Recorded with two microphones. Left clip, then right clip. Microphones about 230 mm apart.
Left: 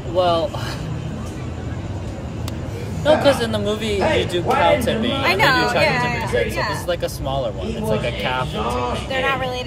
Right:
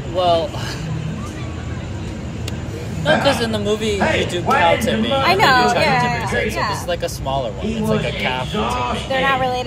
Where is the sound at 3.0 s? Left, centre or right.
Left.